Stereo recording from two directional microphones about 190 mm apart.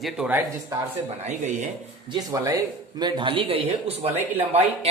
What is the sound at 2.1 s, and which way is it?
Speech, 20° right (ahead or behind).